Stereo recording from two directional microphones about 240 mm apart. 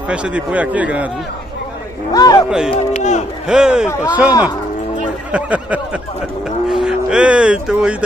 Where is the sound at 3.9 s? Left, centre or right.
Centre.